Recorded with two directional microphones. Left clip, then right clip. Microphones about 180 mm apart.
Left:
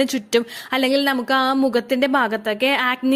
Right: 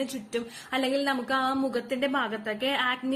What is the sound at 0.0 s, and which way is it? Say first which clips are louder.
Speech: left 13 dB; 60° left (ahead or behind).